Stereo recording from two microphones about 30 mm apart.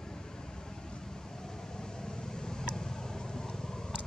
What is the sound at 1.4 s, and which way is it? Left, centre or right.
Vehicle, left.